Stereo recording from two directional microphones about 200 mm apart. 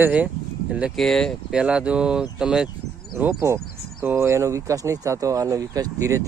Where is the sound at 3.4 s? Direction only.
15° right (ahead or behind).